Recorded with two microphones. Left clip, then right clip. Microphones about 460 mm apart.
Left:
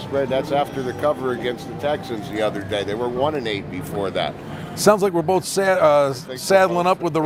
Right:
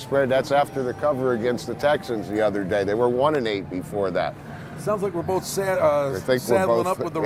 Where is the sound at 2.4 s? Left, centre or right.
Right.